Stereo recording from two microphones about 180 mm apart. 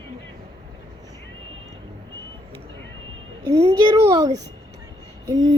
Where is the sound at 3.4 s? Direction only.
20° right (ahead or behind).